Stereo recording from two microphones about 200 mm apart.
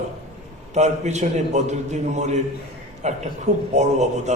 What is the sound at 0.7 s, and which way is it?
A man's voice, 35° right (ahead or behind).